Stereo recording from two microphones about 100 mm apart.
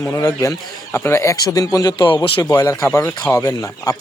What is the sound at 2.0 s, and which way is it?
Speech, 50° left (ahead or behind).